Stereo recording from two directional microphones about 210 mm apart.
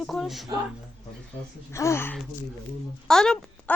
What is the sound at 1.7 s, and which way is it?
Speech, 15° left (ahead or behind).